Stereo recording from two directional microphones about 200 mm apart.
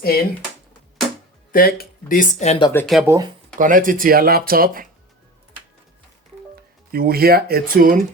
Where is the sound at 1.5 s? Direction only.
45° left (ahead or behind).